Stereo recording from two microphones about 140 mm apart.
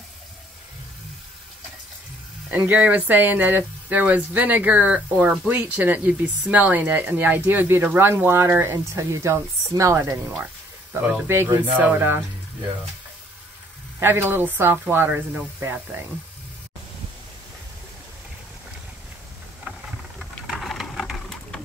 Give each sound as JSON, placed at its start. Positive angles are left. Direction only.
{"t": 2.5, "sound": "speech", "side_deg": -10}
{"t": 13.9, "sound": "speech", "side_deg": -15}
{"t": 20.2, "sound": "a sound", "side_deg": 0}